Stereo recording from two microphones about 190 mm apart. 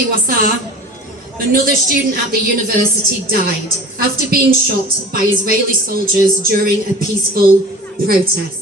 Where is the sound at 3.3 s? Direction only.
50° right (ahead or behind).